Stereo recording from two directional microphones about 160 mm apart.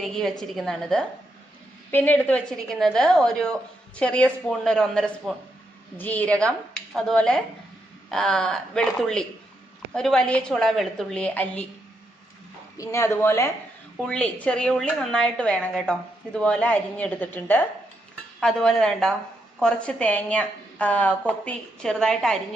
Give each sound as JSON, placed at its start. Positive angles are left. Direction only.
{"t": 0.0, "sound": "a woman's voice", "side_deg": 5}
{"t": 12.7, "sound": "a woman's voice", "side_deg": 20}
{"t": 14.0, "sound": "a woman's voice", "side_deg": 5}